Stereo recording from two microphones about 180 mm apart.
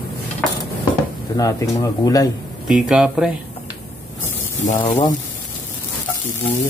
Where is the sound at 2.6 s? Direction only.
5° right (ahead or behind).